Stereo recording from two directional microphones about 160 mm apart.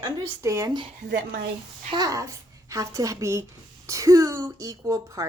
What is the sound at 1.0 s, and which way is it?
Speech, 90° right.